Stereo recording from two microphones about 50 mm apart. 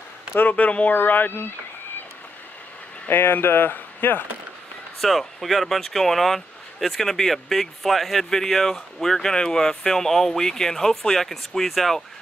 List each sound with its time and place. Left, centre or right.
0.5 s speech: left
0.9 s speech: left
3.1 s speech: left
5.0 s speech: centre